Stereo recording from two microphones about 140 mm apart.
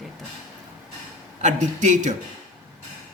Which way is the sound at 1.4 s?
60° right (ahead or behind).